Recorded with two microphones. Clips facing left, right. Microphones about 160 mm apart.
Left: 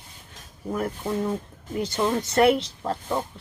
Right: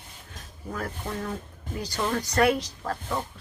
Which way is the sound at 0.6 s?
20° left (ahead or behind).